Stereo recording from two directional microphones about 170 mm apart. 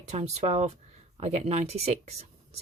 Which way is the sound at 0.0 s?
40° right (ahead or behind).